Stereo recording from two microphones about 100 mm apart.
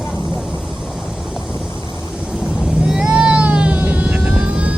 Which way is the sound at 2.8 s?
5° right (ahead or behind).